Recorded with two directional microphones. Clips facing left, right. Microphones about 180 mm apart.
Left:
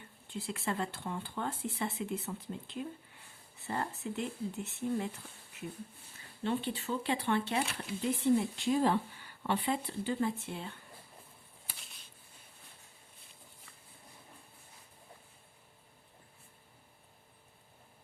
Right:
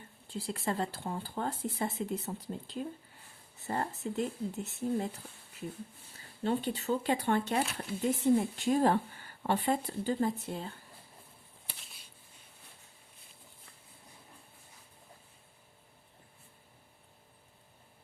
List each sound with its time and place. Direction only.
0.3 s speech: 35° right (ahead or behind)
6.4 s a woman's voice: 40° right (ahead or behind)
11.6 s a sound: centre (ahead or behind)